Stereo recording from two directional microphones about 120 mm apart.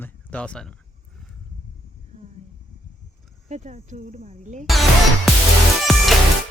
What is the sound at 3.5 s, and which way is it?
Speech, 85° right.